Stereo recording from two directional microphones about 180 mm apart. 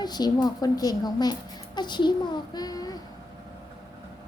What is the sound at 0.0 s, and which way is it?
A woman's voice, 25° left (ahead or behind).